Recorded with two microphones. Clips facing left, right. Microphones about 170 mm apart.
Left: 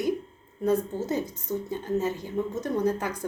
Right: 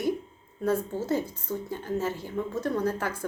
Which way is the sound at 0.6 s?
20° left (ahead or behind).